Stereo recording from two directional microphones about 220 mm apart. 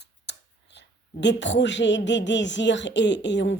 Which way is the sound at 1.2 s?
55° left (ahead or behind).